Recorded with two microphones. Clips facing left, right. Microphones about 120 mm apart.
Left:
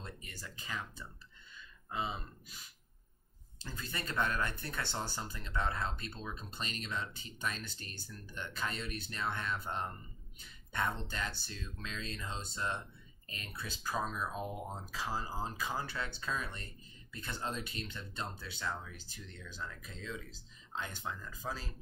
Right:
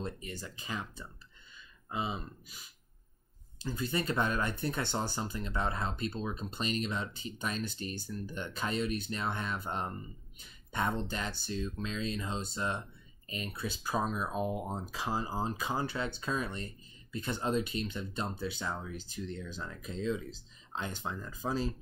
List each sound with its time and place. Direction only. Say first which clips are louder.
0.0 s speech: right 9 dB; 20° right (ahead or behind)
3.5 s speech: right 9 dB; 15° right (ahead or behind)